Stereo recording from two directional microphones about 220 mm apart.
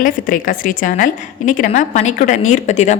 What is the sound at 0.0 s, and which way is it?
A woman's voice, 35° left (ahead or behind).